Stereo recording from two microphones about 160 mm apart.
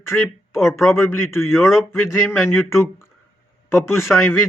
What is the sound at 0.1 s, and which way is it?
Speech, 10° left (ahead or behind).